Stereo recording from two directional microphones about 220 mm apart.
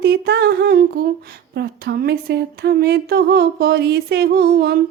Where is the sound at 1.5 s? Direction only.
45° right (ahead or behind).